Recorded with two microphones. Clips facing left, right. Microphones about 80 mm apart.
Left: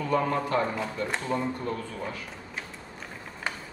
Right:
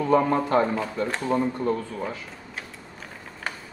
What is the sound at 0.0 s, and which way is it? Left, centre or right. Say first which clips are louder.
Speech: right 5 dB; right.